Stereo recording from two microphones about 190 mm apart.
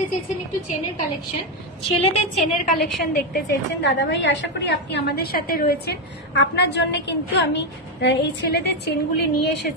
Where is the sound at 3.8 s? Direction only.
70° left (ahead or behind); by 5.8 s 50° left (ahead or behind).